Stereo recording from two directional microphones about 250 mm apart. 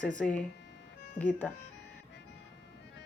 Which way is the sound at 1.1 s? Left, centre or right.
Centre.